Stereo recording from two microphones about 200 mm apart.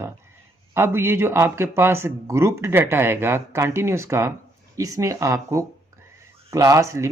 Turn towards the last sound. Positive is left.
turn(degrees=-15)  # may be behind; listen again after turning